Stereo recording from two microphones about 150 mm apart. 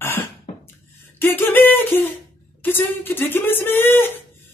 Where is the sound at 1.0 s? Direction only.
15° left (ahead or behind).